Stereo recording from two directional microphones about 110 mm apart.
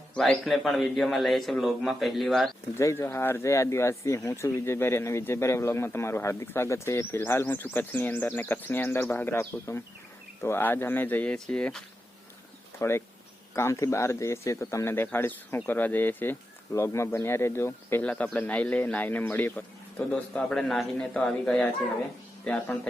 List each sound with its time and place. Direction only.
0.1 s a man's voice: 5° left (ahead or behind)
2.7 s speech: 25° left (ahead or behind); by 11.8 s 5° left (ahead or behind)
12.8 s speech: 25° left (ahead or behind)
18.0 s speech: 15° left (ahead or behind)